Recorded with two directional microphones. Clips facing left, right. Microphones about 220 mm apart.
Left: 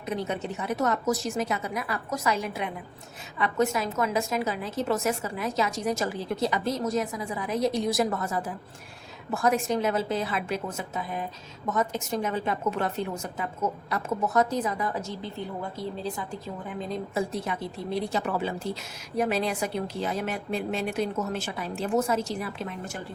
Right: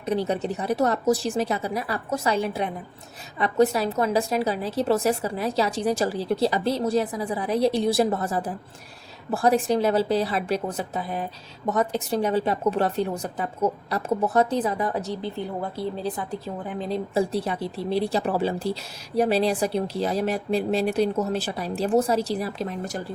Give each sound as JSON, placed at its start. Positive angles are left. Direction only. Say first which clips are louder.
{"t": 0.0, "sound": "speech", "louder": "right 6 dB", "side_deg": -35}
{"t": 16.9, "sound": "speech", "louder": "right 6 dB", "side_deg": -30}